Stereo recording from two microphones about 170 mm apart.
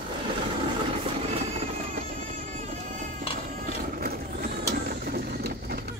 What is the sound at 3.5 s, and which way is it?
Mechanisms, 60° right (ahead or behind).